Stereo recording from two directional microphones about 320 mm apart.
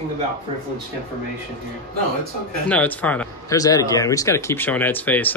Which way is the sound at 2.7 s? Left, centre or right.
Centre.